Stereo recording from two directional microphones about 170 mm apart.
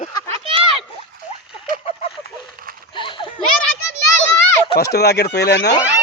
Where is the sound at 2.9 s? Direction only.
30° left (ahead or behind).